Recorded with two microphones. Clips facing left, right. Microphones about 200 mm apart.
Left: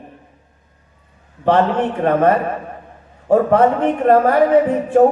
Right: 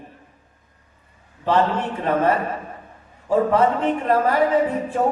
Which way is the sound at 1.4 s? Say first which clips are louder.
Left 5 dB; 60° left (ahead or behind).